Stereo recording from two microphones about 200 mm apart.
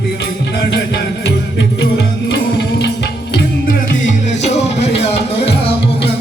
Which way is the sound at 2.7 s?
60° left (ahead or behind).